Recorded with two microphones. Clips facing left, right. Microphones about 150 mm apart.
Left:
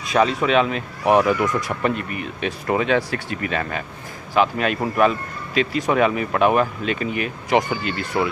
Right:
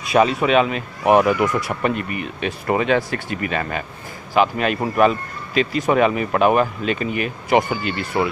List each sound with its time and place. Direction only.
0.0 s a man's voice: 10° right (ahead or behind)